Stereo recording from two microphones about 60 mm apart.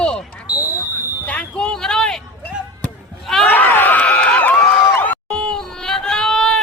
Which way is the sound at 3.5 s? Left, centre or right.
Left.